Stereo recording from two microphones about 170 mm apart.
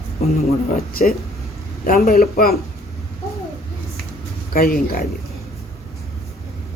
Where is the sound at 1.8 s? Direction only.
60° left (ahead or behind).